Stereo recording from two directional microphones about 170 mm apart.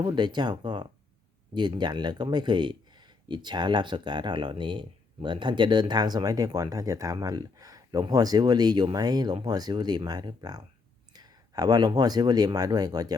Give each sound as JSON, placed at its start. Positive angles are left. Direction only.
{"t": 0.0, "sound": "speech", "side_deg": -25}